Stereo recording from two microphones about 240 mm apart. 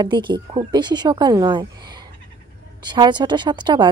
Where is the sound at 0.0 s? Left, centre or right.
Centre.